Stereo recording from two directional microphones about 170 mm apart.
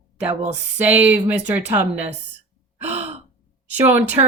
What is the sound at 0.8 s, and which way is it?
Speech, 10° right (ahead or behind).